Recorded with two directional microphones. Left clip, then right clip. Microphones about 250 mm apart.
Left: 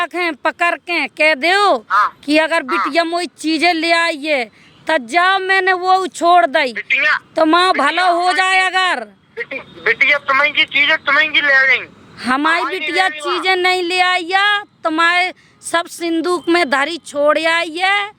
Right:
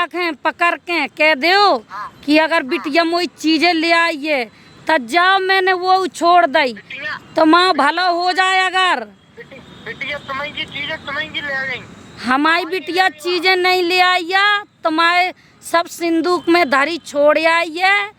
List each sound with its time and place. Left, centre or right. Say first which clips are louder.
0.0 s speech: left 1 dB; centre
1.9 s speech: left 15 dB; left
2.2 s speech: even; centre
6.7 s speech: left 12 dB; left
7.3 s speech: right 3 dB; centre
9.4 s speech: left 14 dB; left
12.2 s speech: even; centre